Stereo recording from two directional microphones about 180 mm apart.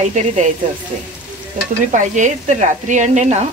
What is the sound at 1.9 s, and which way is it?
Speech, 45° right (ahead or behind).